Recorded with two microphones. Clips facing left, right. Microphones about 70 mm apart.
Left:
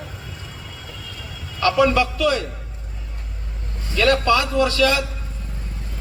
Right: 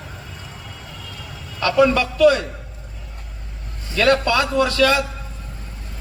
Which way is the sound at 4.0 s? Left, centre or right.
Right.